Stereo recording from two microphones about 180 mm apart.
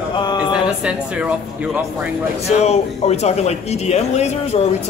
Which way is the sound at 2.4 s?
35° left (ahead or behind).